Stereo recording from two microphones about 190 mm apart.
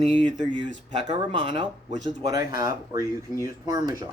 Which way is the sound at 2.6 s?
15° right (ahead or behind).